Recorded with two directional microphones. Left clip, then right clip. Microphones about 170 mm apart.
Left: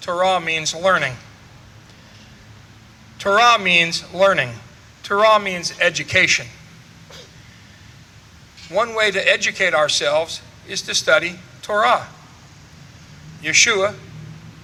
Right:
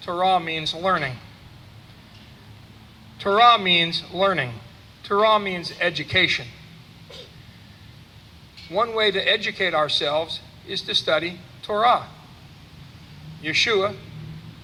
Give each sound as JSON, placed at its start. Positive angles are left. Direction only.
{"t": 0.0, "sound": "a man's voice", "side_deg": 30}
{"t": 3.2, "sound": "a man's voice", "side_deg": 30}
{"t": 8.7, "sound": "a man's voice", "side_deg": 30}
{"t": 13.4, "sound": "a man's voice", "side_deg": 25}